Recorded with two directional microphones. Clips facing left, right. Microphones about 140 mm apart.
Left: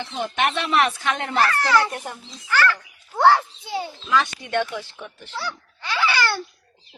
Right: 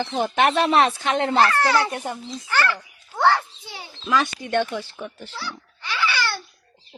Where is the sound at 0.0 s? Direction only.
40° right (ahead or behind); by 2.6 s 25° right (ahead or behind).